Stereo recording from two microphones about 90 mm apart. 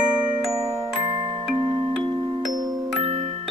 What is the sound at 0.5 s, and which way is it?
Glockenspiel, 35° right (ahead or behind).